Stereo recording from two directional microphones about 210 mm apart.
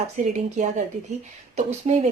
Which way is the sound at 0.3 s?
35° right (ahead or behind).